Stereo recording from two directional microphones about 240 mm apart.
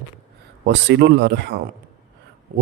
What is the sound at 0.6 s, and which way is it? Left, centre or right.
A man's voice, right.